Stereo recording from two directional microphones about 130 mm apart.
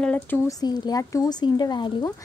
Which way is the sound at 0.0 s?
10° left (ahead or behind).